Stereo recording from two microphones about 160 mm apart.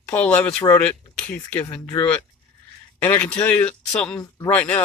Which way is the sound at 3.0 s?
10° left (ahead or behind).